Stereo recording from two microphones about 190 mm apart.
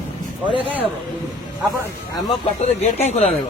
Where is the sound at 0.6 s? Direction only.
30° right (ahead or behind).